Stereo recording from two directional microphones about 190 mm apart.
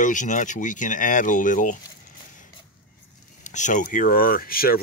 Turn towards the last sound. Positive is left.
turn(degrees=50)  # may be behind; listen again after turning